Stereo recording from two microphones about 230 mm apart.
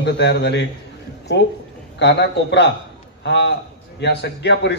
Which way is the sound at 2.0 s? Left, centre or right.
Left.